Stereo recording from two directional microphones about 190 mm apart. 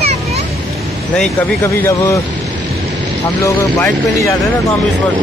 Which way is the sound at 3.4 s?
15° left (ahead or behind).